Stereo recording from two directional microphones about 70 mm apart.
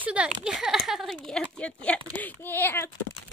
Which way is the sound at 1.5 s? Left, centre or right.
Centre.